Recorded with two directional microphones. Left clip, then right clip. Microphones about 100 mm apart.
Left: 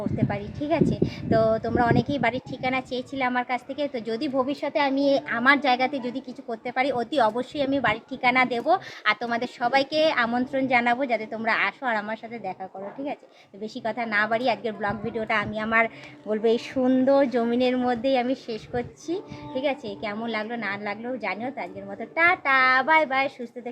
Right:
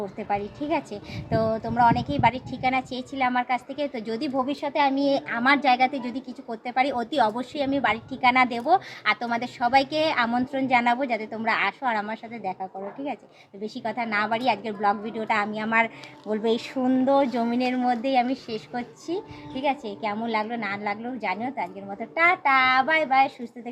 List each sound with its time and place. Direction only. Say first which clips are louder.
0.3 s a woman's voice: right 4 dB; 25° left (ahead or behind)
13.7 s a woman's voice: left 2 dB; 30° left (ahead or behind)